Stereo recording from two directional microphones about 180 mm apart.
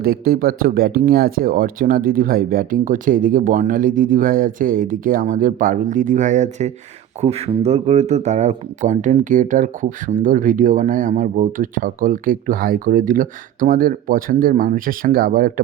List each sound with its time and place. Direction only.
0.0 s speech: 55° right (ahead or behind)